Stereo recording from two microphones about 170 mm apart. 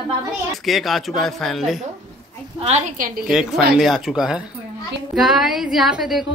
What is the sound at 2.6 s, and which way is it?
Speech, 40° right (ahead or behind).